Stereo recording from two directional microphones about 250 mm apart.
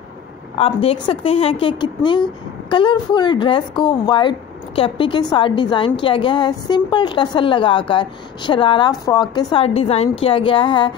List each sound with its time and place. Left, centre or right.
0.6 s a woman's voice: left